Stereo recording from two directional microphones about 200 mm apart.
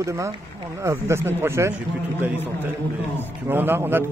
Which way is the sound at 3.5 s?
10° right (ahead or behind).